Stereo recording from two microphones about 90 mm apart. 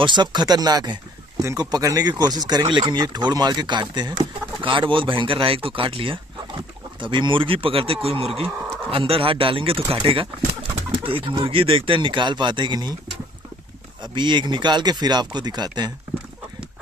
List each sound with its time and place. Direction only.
0.0 s speech: 55° right (ahead or behind); by 6.1 s 80° right
7.0 s speech: 65° right (ahead or behind)
14.1 s speech: 60° right (ahead or behind)